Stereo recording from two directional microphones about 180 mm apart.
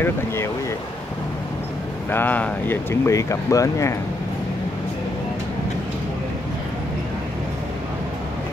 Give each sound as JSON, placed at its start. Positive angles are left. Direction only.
{"t": 0.0, "sound": "speech", "side_deg": 15}
{"t": 2.0, "sound": "speech", "side_deg": 10}